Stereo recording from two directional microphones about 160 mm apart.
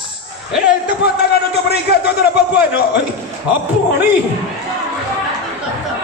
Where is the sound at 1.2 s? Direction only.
90° left.